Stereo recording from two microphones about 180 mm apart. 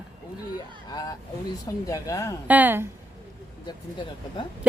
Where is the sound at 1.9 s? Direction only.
20° left (ahead or behind).